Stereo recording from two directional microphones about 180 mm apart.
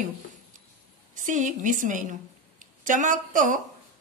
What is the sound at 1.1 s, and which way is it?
A woman's voice, 45° right (ahead or behind).